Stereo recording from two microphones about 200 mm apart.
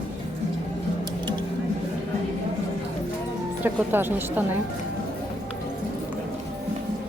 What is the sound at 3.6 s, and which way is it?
Speech, 10° right (ahead or behind).